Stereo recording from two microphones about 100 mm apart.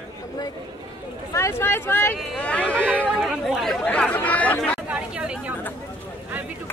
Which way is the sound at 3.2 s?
Centre (ahead or behind).